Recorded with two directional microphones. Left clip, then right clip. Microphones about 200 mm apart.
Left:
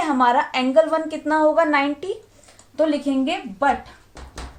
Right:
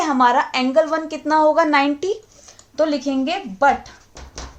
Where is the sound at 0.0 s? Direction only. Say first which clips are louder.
Right 2 dB; 35° right (ahead or behind).